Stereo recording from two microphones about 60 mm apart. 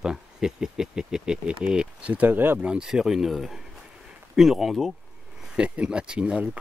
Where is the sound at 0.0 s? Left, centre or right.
Centre; by 2.6 s right.